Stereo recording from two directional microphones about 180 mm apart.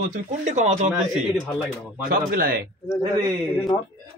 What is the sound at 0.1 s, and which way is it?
Speech, 45° right (ahead or behind).